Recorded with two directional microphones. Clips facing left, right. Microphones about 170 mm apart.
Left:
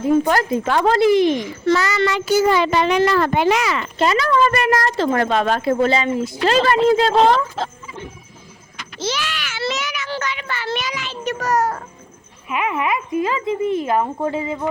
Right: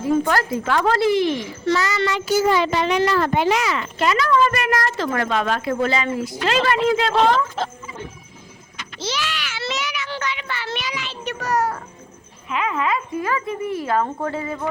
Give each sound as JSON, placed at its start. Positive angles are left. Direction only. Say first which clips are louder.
{"t": 0.3, "sound": "speech", "louder": "left 3 dB", "side_deg": 20}
{"t": 1.6, "sound": "a child's voice", "louder": "left 3 dB", "side_deg": 60}
{"t": 3.9, "sound": "a woman's voice", "louder": "left 1 dB", "side_deg": 30}
{"t": 9.0, "sound": "a sound", "louder": "left 2 dB", "side_deg": 50}
{"t": 12.5, "sound": "speech", "louder": "left 1 dB", "side_deg": 15}